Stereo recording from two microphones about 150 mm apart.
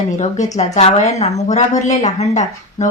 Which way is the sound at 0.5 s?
50° left (ahead or behind).